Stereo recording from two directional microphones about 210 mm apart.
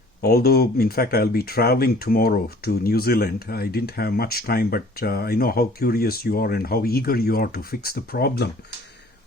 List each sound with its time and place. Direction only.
0.2 s speech: 50° left (ahead or behind)